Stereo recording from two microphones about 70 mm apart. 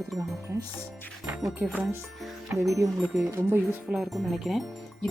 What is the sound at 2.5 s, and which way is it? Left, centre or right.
Speech, right.